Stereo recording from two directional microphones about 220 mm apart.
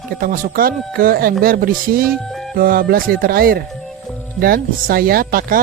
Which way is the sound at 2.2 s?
Centre (ahead or behind).